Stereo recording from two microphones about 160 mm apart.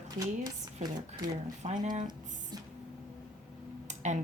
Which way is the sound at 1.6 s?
45° right (ahead or behind).